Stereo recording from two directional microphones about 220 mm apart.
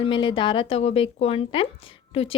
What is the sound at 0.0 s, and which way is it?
A woman's voice, 20° left (ahead or behind).